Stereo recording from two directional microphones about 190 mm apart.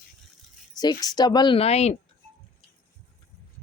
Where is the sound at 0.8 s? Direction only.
20° left (ahead or behind).